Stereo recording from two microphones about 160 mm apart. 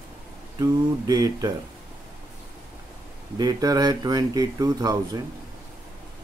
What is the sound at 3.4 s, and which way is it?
Speech, 25° right (ahead or behind).